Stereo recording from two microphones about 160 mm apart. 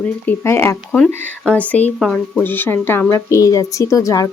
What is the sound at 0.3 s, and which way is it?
Speech, 15° left (ahead or behind).